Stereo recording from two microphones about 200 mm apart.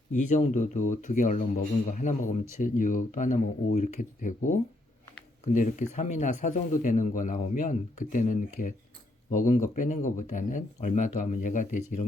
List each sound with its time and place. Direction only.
0.1 s speech: 40° left (ahead or behind)
5.5 s speech: 40° left (ahead or behind)